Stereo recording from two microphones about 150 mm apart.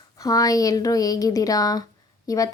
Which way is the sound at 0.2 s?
25° left (ahead or behind).